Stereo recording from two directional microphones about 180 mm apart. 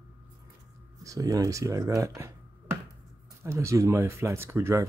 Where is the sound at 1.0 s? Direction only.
20° right (ahead or behind).